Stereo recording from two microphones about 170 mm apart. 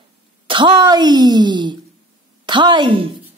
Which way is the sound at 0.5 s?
30° right (ahead or behind).